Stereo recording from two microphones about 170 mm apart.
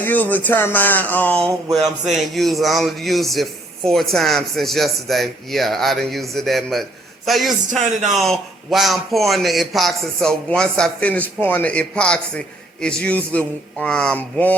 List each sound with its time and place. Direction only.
0.0 s speech: 10° left (ahead or behind)
1.5 s a sound: 20° right (ahead or behind)
2.1 s speech: centre (ahead or behind)